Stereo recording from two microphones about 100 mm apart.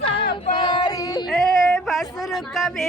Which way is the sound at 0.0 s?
65° left (ahead or behind).